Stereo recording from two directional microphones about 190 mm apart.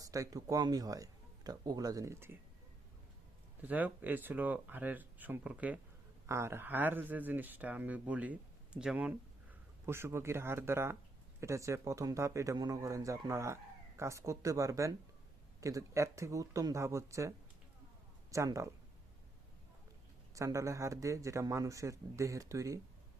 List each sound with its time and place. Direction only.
0.0 s speech: 20° right (ahead or behind)
3.6 s a man's voice: 10° right (ahead or behind)
20.3 s a man's voice: 15° right (ahead or behind)